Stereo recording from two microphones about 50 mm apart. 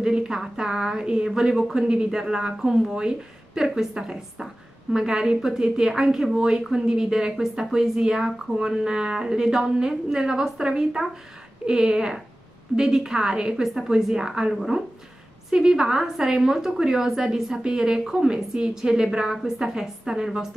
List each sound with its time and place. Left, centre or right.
0.0 s a sound: centre
0.4 s a woman's voice: centre
15.5 s a woman's voice: centre